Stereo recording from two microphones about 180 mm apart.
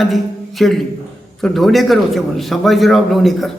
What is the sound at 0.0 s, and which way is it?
A man's voice, centre (ahead or behind).